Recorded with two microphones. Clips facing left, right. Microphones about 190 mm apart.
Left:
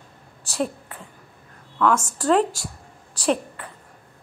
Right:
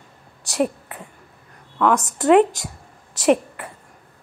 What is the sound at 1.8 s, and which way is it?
Speech, 15° right (ahead or behind).